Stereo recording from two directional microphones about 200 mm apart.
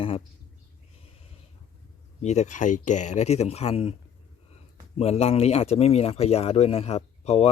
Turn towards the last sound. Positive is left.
turn(degrees=30)  # may be behind; listen again after turning